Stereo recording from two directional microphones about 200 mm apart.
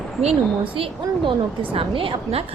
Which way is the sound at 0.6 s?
25° right (ahead or behind).